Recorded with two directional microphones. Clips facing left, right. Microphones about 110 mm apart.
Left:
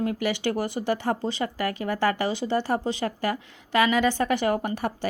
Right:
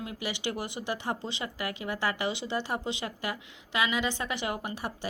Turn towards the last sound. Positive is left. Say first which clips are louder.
# left 8 dB
turn(degrees=50)  # may be behind; listen again after turning